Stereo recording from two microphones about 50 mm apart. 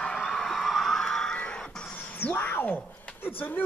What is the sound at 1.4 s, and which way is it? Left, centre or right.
Music, left.